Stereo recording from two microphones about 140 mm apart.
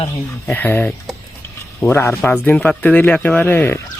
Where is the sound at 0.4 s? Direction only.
10° left (ahead or behind).